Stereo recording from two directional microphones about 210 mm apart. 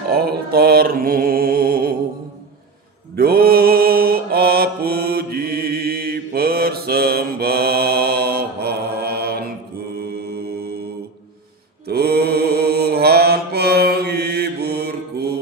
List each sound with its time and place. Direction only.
0.1 s mantra: 45° right (ahead or behind)
3.2 s mantra: 45° right (ahead or behind)
11.9 s mantra: 50° right (ahead or behind)